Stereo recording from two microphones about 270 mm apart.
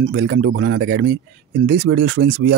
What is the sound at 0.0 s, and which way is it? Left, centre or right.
Speech, right.